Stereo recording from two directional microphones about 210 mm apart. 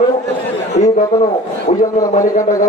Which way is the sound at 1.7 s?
30° left (ahead or behind).